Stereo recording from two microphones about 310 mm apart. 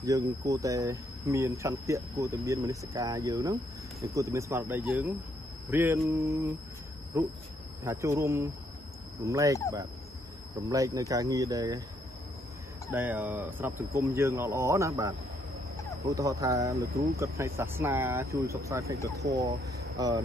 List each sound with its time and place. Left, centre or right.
0.0 s speech: centre
10.6 s speech: centre
12.9 s speech: centre